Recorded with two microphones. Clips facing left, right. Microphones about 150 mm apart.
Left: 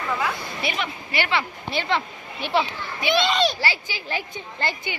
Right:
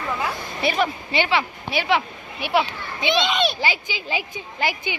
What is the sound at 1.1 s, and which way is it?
Speech, 15° right (ahead or behind).